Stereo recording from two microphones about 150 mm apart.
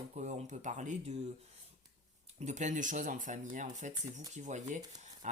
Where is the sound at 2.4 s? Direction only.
50° right (ahead or behind).